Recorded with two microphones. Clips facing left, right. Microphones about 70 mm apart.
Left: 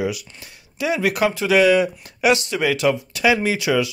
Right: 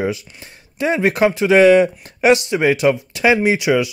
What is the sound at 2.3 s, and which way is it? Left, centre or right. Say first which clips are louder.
Speech: right 5 dB; right.